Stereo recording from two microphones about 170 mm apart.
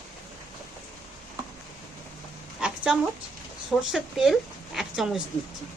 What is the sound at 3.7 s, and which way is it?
Speech, 5° right (ahead or behind).